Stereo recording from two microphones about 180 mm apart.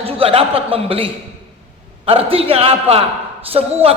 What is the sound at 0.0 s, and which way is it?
A man's voice, 30° right (ahead or behind).